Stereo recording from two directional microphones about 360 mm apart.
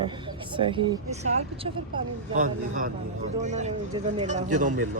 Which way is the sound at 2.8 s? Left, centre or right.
Centre.